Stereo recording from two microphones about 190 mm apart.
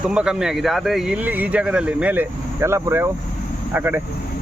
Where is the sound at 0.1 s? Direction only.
5° right (ahead or behind).